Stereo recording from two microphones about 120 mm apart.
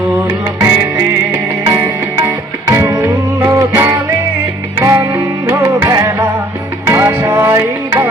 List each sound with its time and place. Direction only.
0.3 s music: 25° right (ahead or behind)